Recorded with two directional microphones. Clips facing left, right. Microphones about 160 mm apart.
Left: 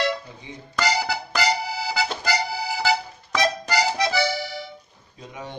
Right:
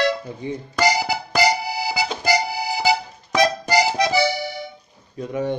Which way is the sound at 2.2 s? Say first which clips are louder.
Right 4 dB; 15° right (ahead or behind).